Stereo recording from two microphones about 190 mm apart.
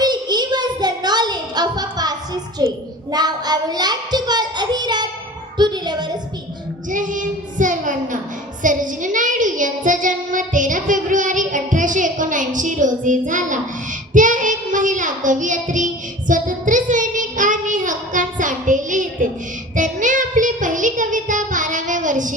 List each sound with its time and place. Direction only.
0.0 s a sound: 20° right (ahead or behind)
2.6 s a child's voice: 20° right (ahead or behind)
5.5 s music: 20° right (ahead or behind)
6.9 s child singing: 45° right (ahead or behind)